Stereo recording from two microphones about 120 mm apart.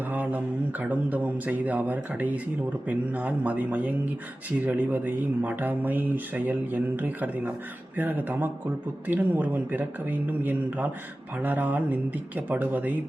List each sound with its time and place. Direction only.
0.1 s speech: 15° right (ahead or behind)